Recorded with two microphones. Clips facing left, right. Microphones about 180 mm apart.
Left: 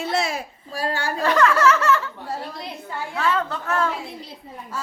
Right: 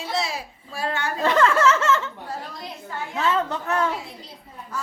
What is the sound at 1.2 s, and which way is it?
Speech, 25° right (ahead or behind).